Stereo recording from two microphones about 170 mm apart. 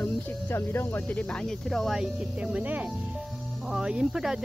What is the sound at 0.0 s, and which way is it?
Speech, 15° left (ahead or behind).